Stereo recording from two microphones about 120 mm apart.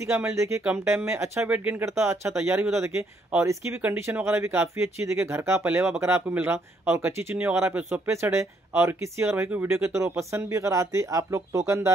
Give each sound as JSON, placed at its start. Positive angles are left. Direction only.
{"t": 0.0, "sound": "speech", "side_deg": -20}